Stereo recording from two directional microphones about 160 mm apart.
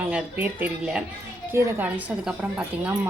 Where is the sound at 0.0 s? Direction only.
10° right (ahead or behind).